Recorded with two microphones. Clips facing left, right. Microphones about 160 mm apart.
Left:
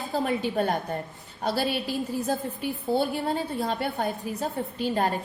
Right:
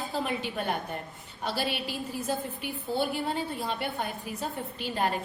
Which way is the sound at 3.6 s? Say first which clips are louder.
Left 5 dB; 40° left (ahead or behind).